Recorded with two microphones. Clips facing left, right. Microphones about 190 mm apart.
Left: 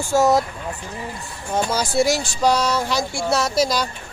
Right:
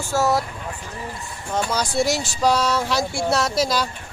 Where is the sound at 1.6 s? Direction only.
5° left (ahead or behind).